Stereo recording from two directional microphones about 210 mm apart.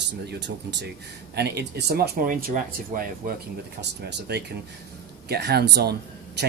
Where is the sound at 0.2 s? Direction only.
50° right (ahead or behind).